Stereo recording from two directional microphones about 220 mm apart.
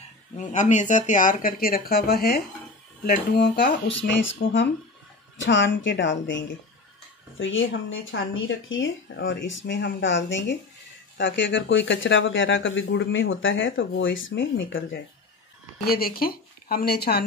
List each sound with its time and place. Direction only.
0.4 s speech: 35° left (ahead or behind); by 15.0 s 60° left (ahead or behind)
15.8 s speech: 45° left (ahead or behind)